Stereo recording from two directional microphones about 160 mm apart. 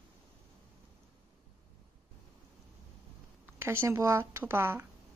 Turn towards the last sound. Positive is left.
turn(degrees=-15)  # may be behind; listen again after turning